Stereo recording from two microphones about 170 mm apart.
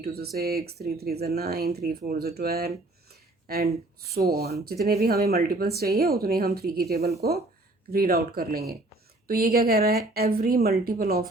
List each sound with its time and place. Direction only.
0.0 s speech: 65° right (ahead or behind)